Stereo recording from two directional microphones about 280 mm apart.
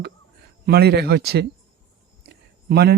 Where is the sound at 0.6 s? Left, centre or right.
Right.